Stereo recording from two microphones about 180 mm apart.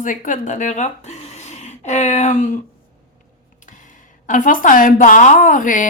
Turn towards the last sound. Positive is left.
turn(degrees=45)  # may be behind; listen again after turning